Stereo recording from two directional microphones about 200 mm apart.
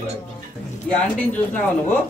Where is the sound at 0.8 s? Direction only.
5° left (ahead or behind).